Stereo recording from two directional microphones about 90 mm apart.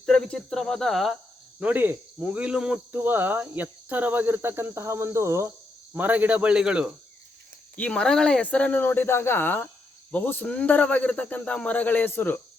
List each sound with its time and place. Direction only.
0.0 s speech: 5° left (ahead or behind)
1.5 s speech: 20° right (ahead or behind)
2.9 s cricket: 20° right (ahead or behind)
5.9 s speech: 20° right (ahead or behind)
7.8 s speech: 15° left (ahead or behind)